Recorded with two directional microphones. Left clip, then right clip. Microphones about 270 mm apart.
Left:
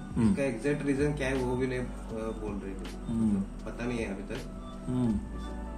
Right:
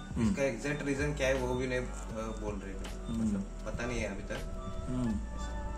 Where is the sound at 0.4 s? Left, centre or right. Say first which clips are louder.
Left 3 dB; right.